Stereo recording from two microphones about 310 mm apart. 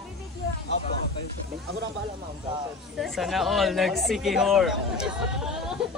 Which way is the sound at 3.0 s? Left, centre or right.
Centre.